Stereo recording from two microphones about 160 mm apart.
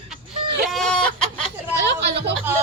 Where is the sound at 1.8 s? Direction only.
90° right.